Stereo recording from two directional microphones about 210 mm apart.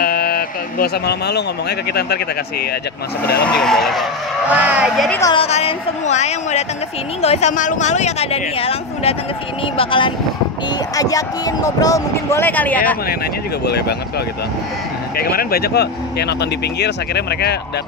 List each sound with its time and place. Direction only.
0.0 s speech: 45° left (ahead or behind)
3.4 s speech: 5° left (ahead or behind)
5.2 s speech: 25° left (ahead or behind); by 12.9 s 5° left (ahead or behind)
13.7 s speech: 50° left (ahead or behind)
15.1 s speech: 45° left (ahead or behind)